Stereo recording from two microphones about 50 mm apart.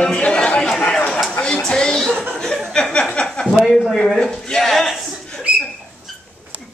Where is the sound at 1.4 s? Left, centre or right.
Centre.